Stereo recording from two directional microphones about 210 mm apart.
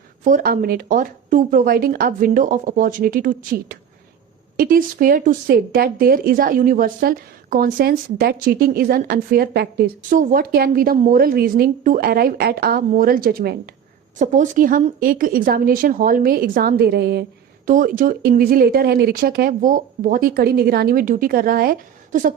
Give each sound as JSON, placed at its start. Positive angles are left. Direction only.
{"t": 0.3, "sound": "speech", "side_deg": -40}
{"t": 14.2, "sound": "speech", "side_deg": -35}
{"t": 17.7, "sound": "speech", "side_deg": -40}